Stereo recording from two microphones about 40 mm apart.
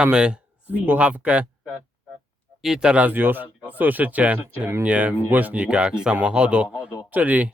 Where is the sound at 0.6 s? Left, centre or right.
Right.